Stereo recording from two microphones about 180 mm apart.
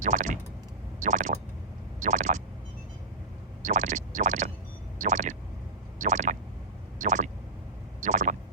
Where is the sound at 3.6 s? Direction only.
45° right (ahead or behind).